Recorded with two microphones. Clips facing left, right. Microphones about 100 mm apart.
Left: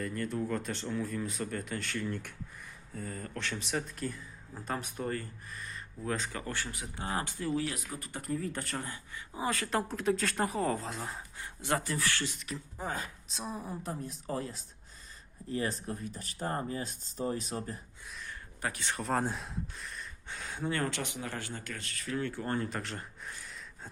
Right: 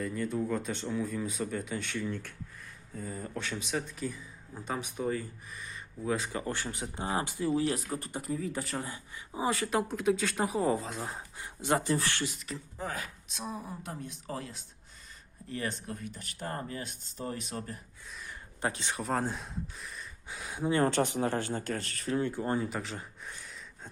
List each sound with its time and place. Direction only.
0.0 s speech: 5° right (ahead or behind)
7.6 s speech: 35° right (ahead or behind)
8.2 s speech: centre (ahead or behind)
8.9 s speech: 20° right (ahead or behind)
9.7 s speech: 5° right (ahead or behind)
11.0 s speech: 20° right (ahead or behind)
12.2 s speech: centre (ahead or behind)
12.8 s speech: 30° left (ahead or behind)
18.3 s a sound: 20° right (ahead or behind)
19.0 s speech: centre (ahead or behind); by 20.8 s 15° right (ahead or behind)
20.8 s speech: 35° right (ahead or behind)
22.1 s speech: 20° right (ahead or behind)
22.6 s a sound: 5° right (ahead or behind)